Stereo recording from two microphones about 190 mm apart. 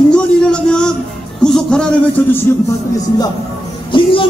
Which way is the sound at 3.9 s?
25° left (ahead or behind).